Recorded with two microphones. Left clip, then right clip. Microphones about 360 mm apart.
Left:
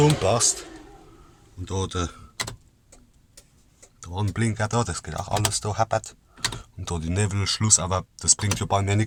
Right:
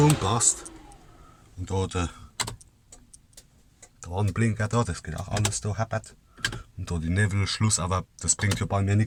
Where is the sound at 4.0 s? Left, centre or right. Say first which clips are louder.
Even; centre.